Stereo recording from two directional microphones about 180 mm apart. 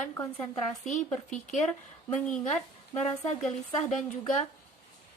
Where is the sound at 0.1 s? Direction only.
20° left (ahead or behind).